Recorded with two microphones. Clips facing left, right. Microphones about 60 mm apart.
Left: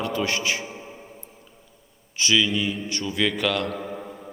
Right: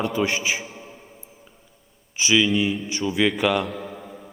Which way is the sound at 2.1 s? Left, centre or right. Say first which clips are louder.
Right 3 dB; centre.